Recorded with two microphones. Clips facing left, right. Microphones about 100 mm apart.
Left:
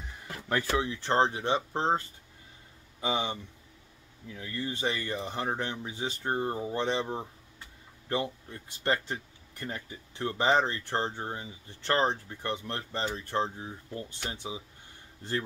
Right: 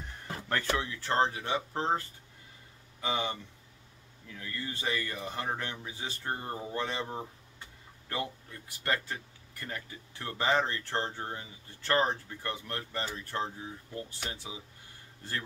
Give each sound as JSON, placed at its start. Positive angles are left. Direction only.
{"t": 0.5, "sound": "speech", "side_deg": 15}